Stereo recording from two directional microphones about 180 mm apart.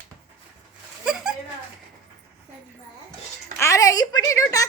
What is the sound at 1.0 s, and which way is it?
Speech, 5° right (ahead or behind).